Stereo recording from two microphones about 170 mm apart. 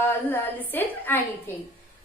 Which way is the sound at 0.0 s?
15° left (ahead or behind).